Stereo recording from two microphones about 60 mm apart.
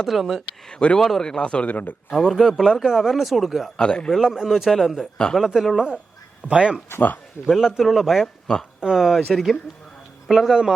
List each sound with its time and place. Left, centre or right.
0.0 s speech: centre
0.7 s speech: centre
0.9 s a man's voice: centre; by 2.0 s left
2.0 s speech: centre
3.8 s a man's voice: centre
4.1 s speech: centre
5.1 s a man's voice: centre
5.5 s speech: centre
6.5 s speech: centre
6.9 s speech: left
7.4 s speech: centre